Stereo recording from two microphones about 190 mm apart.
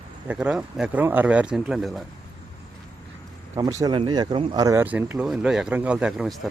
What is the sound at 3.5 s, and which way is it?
Speech, 15° right (ahead or behind).